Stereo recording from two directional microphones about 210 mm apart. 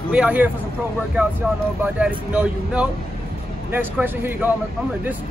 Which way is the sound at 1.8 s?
5° right (ahead or behind).